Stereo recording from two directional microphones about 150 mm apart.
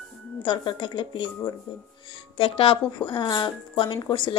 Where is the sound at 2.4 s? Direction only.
35° left (ahead or behind).